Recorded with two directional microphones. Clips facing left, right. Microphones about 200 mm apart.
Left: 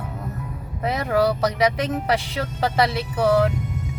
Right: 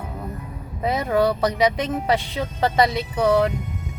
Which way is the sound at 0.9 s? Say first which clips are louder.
Right 1 dB; centre (ahead or behind).